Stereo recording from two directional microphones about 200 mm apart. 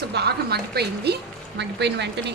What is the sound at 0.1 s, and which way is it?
A woman's voice, 55° right (ahead or behind).